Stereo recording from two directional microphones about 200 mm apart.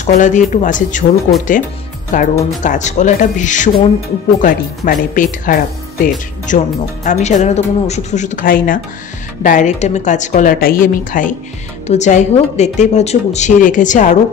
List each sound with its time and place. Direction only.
0.0 s a woman's voice: 40° left (ahead or behind)